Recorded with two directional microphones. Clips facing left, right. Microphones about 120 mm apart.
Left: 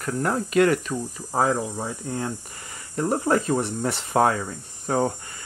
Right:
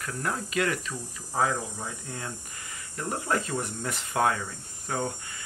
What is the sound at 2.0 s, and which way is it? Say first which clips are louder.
Speech: left 9 dB; 35° left (ahead or behind).